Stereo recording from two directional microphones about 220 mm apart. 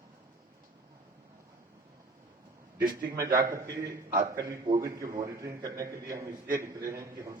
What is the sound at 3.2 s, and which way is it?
A man's voice, 15° right (ahead or behind).